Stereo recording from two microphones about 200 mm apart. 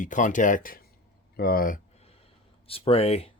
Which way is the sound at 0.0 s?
40° left (ahead or behind).